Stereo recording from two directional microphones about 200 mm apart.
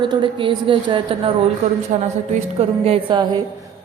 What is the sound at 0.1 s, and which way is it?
A woman's voice, 25° right (ahead or behind).